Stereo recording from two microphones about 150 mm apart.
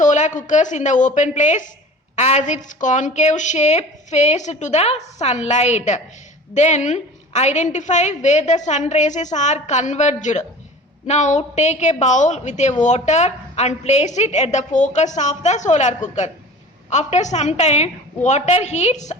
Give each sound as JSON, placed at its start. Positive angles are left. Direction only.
{"t": 0.0, "sound": "a woman's voice", "side_deg": 55}